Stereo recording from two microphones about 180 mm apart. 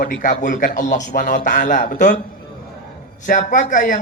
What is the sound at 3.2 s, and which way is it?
Speech, 45° left (ahead or behind).